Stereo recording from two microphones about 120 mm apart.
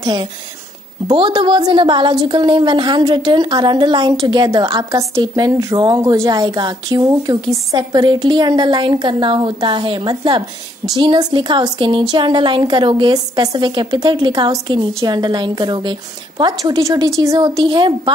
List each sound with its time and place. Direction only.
0.0 s a woman's voice: 35° right (ahead or behind)
17.6 s a woman's voice: 40° right (ahead or behind)